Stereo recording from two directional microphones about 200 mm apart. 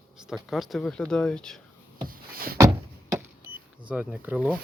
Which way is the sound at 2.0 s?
45° right (ahead or behind).